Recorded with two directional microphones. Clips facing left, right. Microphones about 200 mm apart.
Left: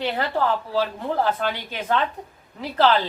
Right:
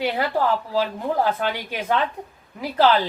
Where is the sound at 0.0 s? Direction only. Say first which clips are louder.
Right 1 dB; 10° right (ahead or behind).